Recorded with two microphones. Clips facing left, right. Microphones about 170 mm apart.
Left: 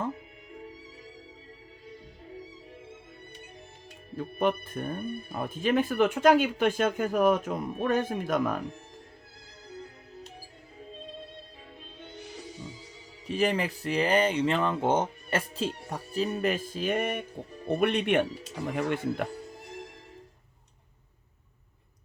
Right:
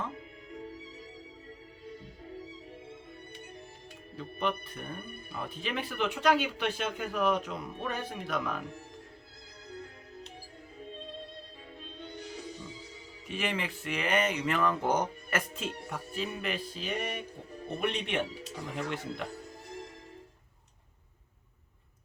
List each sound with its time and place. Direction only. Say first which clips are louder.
4.1 s speech: left 6 dB; 50° left (ahead or behind)
13.2 s speech: left 7 dB; 35° left (ahead or behind); by 19.3 s 60° left (ahead or behind)